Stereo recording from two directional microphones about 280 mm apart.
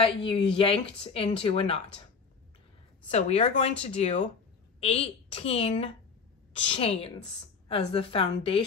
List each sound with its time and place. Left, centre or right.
0.0 s speech: centre
3.1 s speech: left